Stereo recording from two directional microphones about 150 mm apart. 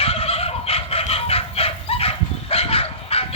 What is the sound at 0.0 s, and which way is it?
Fowl, 40° left (ahead or behind).